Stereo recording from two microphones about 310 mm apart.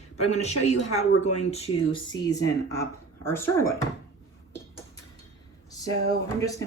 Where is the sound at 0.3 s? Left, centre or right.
Left.